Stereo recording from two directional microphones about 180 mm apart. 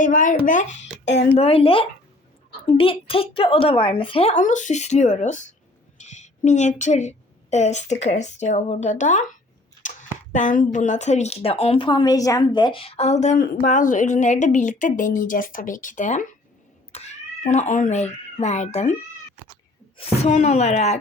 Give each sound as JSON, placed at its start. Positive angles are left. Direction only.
{"t": 0.0, "sound": "a woman's voice", "side_deg": 45}
{"t": 0.8, "sound": "a sound", "side_deg": 75}
{"t": 1.3, "sound": "a woman's voice", "side_deg": 30}
{"t": 20.0, "sound": "speech", "side_deg": 40}